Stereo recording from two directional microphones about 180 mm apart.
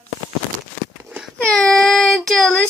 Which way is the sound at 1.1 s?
5° right (ahead or behind).